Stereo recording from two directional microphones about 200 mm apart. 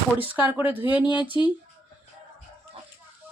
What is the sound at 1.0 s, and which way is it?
Speech, 20° left (ahead or behind).